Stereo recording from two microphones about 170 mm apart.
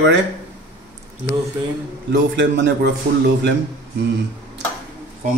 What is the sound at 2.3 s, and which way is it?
Speech, 90° right.